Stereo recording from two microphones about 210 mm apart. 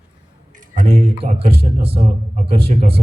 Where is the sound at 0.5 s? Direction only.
40° right (ahead or behind).